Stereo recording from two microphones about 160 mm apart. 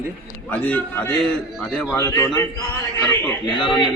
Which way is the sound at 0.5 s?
10° left (ahead or behind).